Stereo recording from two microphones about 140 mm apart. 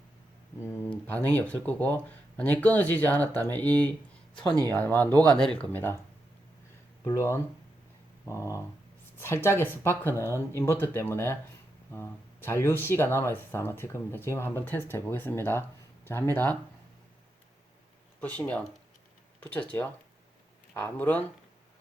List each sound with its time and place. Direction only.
0.6 s speech: 10° left (ahead or behind)
7.0 s a sound: 20° left (ahead or behind)
9.1 s speech: 15° left (ahead or behind)
10.2 s a sound: 20° left (ahead or behind)
10.6 s speech: 15° left (ahead or behind)
18.2 s speech: 10° left (ahead or behind)